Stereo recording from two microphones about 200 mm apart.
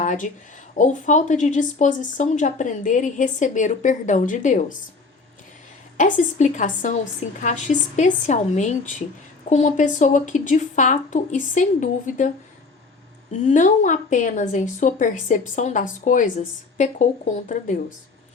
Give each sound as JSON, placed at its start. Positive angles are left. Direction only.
{"t": 0.0, "sound": "a sound", "side_deg": 40}
{"t": 0.7, "sound": "speech", "side_deg": 40}
{"t": 6.0, "sound": "speech", "side_deg": 40}
{"t": 13.4, "sound": "speech", "side_deg": 40}